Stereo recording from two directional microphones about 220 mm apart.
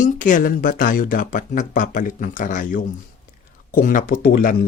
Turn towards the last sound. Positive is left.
turn(degrees=40)  # may be behind; listen again after turning